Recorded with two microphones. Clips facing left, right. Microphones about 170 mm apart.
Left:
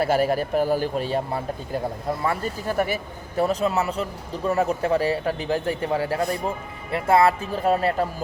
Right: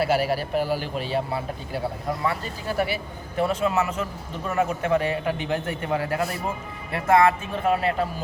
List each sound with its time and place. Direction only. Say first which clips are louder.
0.0 s a man's voice: left 2 dB; 45° left (ahead or behind)